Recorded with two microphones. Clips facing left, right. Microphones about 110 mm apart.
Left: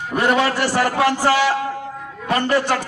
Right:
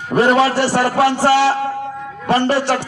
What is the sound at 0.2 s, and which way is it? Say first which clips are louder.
A man's voice: right 5 dB; 30° right (ahead or behind).